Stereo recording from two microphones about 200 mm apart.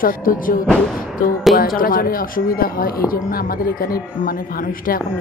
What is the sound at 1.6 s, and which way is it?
Speech, 45° left (ahead or behind).